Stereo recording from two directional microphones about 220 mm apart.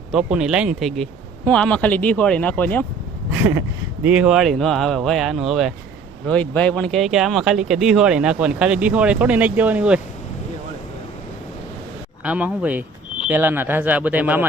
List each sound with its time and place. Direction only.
0.1 s speech: 5° right (ahead or behind)
3.2 s a sound: 10° right (ahead or behind)
4.0 s speech: 5° right (ahead or behind)
12.2 s speech: 5° right (ahead or behind)